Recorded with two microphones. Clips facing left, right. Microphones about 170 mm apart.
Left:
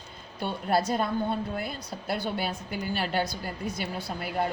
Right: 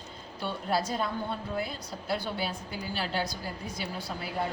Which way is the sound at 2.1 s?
60° left (ahead or behind).